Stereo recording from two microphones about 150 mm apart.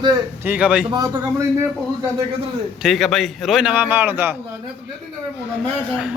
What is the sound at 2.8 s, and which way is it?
A man's voice, centre (ahead or behind).